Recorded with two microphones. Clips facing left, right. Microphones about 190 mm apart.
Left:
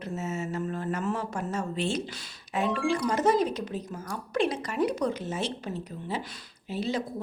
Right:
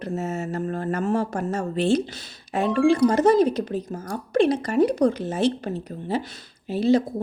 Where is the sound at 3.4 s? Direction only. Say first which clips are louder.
Right 8 dB; 35° right (ahead or behind).